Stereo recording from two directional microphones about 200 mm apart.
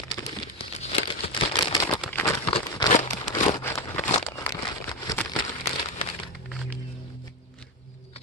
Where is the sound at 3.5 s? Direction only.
15° left (ahead or behind).